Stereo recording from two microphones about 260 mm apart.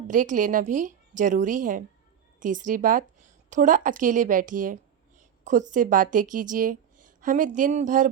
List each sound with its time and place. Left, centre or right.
0.1 s a woman's voice: right